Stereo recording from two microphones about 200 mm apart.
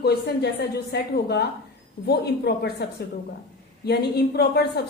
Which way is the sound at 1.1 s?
55° left (ahead or behind).